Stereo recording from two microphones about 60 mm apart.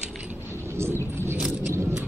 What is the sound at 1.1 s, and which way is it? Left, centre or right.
Vehicle, right.